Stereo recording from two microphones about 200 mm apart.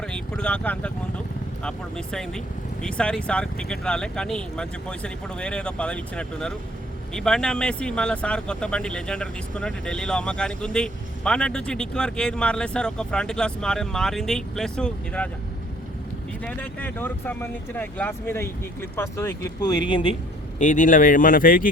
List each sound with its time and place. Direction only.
0.0 s speech: 5° left (ahead or behind)
16.4 s speech: 5° left (ahead or behind); by 20.1 s 25° left (ahead or behind)
20.6 s speech: 40° left (ahead or behind)